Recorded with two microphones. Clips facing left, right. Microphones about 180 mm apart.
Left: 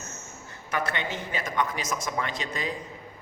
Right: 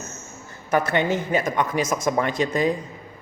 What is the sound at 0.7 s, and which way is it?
A man's voice, 45° right (ahead or behind).